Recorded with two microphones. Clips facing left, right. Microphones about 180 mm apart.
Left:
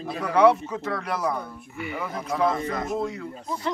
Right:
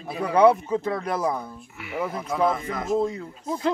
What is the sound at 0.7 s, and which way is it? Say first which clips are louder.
Speech: right 4 dB; 25° right (ahead or behind).